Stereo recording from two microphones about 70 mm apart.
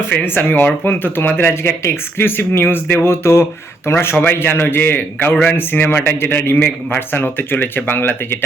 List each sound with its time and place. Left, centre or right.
0.1 s speech: left